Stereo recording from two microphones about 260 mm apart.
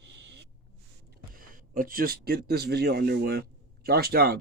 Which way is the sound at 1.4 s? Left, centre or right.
Right.